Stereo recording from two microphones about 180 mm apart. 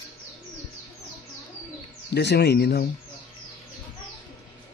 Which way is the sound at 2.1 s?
70° left (ahead or behind).